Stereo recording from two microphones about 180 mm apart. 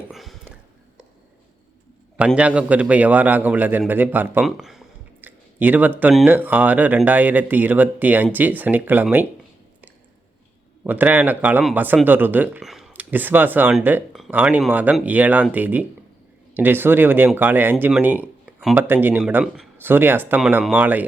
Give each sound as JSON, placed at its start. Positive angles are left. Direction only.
{"t": 0.1, "sound": "speech", "side_deg": 0}
{"t": 2.1, "sound": "speech", "side_deg": -5}
{"t": 10.8, "sound": "speech", "side_deg": -10}